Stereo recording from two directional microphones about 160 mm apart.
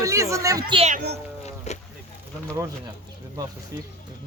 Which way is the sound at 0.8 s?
45° right (ahead or behind).